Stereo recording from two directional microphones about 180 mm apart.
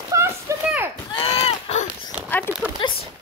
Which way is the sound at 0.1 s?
15° right (ahead or behind).